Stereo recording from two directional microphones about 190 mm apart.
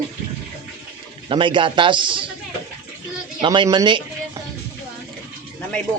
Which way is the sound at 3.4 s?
25° right (ahead or behind).